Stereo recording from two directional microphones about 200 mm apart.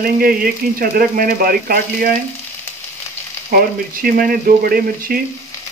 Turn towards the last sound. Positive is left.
turn(degrees=-45)  # may be behind; listen again after turning